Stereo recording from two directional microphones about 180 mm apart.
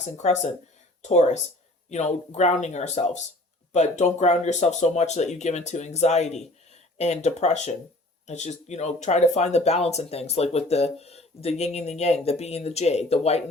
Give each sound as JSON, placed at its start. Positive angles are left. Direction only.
{"t": 0.2, "sound": "speech", "side_deg": 40}